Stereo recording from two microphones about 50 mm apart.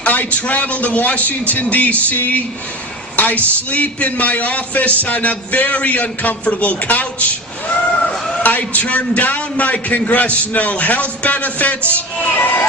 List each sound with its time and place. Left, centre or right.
0.0 s a man's voice: left
8.3 s a man's voice: left
11.9 s a sound: left